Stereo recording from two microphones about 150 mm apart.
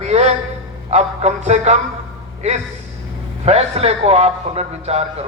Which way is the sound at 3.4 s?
45° right (ahead or behind).